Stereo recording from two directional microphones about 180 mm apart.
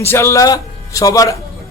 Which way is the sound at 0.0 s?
15° left (ahead or behind).